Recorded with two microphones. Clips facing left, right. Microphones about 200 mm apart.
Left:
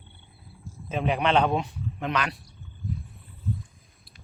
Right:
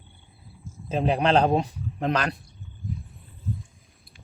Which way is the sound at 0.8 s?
35° right (ahead or behind).